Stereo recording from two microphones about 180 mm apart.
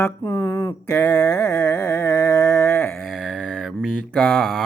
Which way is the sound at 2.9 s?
5° left (ahead or behind).